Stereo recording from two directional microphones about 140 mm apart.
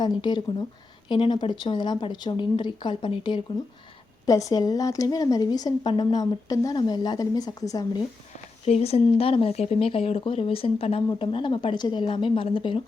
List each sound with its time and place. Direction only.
0.0 s speech: 30° left (ahead or behind)
4.3 s a woman's voice: 25° left (ahead or behind)
8.6 s speech: 45° left (ahead or behind)